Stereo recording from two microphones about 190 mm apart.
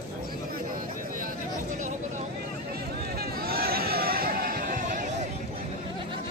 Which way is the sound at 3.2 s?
55° right (ahead or behind).